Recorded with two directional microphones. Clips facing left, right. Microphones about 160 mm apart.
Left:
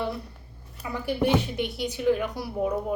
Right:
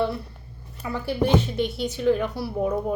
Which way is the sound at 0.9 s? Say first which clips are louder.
Right 2 dB; 15° left (ahead or behind).